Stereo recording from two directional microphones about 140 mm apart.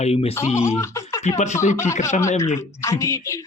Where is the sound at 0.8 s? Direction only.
20° left (ahead or behind).